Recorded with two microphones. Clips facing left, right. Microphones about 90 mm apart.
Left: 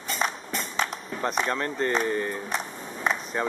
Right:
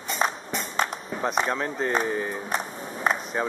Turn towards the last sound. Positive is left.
turn(degrees=-5)  # may be behind; listen again after turning